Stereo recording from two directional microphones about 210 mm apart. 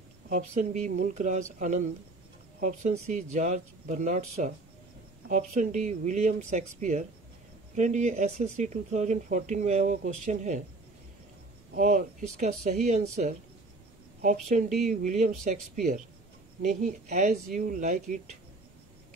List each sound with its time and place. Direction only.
0.3 s speech: 35° right (ahead or behind)
11.7 s speech: 35° right (ahead or behind)